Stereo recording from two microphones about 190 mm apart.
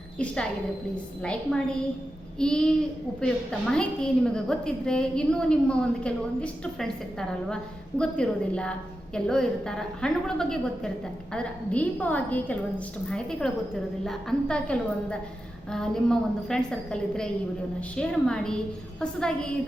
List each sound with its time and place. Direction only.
1.2 s a woman's voice: 5° left (ahead or behind)